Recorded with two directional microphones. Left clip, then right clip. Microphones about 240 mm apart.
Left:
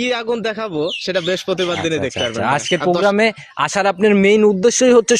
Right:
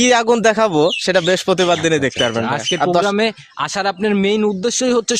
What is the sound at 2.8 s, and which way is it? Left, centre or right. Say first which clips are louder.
Speech: right 3 dB; right.